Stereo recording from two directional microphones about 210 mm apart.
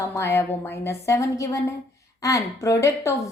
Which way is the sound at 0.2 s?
10° left (ahead or behind).